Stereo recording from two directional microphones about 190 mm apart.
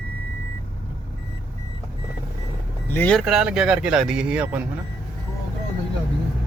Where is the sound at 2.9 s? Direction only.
10° left (ahead or behind).